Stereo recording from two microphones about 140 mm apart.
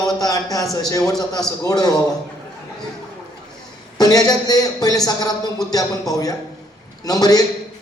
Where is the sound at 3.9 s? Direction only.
25° left (ahead or behind).